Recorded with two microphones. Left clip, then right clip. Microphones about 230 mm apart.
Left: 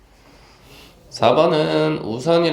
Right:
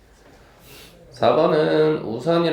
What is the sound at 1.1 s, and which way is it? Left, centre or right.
Speech, left.